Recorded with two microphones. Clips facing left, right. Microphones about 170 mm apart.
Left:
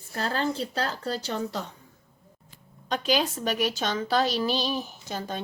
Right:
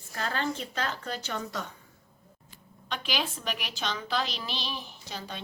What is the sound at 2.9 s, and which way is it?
A woman's voice, 40° left (ahead or behind).